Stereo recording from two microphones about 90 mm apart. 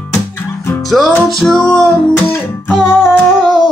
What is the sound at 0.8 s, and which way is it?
Music, centre (ahead or behind).